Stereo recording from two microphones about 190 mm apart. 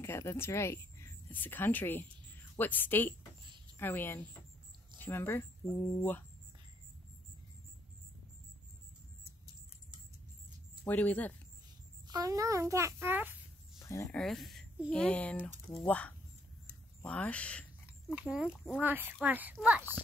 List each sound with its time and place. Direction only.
0.0 s a woman's voice: 15° left (ahead or behind)
10.9 s a woman's voice: 10° left (ahead or behind)
12.1 s a child's voice: 20° right (ahead or behind)
13.7 s a sound: 15° left (ahead or behind)
14.1 s a woman's voice: centre (ahead or behind)
18.1 s a child's voice: 5° right (ahead or behind)